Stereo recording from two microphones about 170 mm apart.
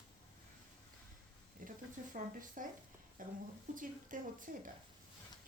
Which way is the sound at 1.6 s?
50° right (ahead or behind).